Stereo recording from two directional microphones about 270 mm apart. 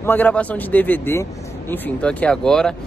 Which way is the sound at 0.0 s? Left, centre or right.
Centre.